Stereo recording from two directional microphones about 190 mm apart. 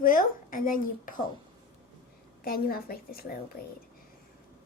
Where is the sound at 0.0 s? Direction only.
45° left (ahead or behind).